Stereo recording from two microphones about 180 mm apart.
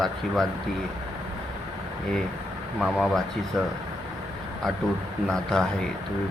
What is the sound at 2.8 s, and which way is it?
Speech, centre (ahead or behind).